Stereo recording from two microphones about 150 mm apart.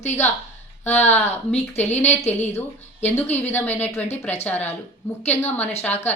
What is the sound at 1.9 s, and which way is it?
Speech, 15° left (ahead or behind).